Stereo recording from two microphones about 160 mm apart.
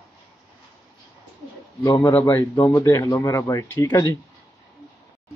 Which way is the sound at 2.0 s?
15° left (ahead or behind).